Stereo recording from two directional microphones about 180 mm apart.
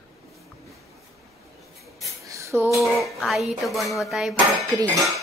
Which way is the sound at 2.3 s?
15° right (ahead or behind).